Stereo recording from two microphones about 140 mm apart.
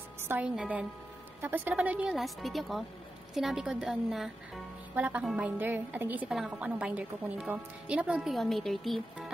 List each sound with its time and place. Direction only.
0.2 s music: 15° right (ahead or behind)
0.6 s a woman's voice: 10° right (ahead or behind)